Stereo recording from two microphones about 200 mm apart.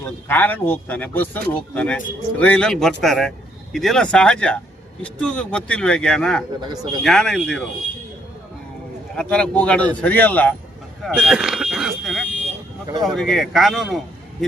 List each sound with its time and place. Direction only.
0.3 s speech: 10° left (ahead or behind)
6.6 s speech: 20° right (ahead or behind)
7.0 s speech: centre (ahead or behind)
9.1 s speech: 5° left (ahead or behind)
11.0 s buzzer: 5° right (ahead or behind)
13.0 s speech: centre (ahead or behind)